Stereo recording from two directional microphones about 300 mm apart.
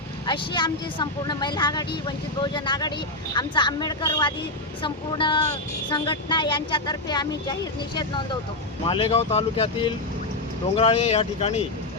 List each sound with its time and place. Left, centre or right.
0.3 s speech: centre